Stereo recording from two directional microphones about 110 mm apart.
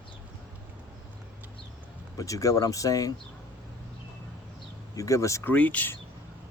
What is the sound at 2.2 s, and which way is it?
Speech, 30° left (ahead or behind).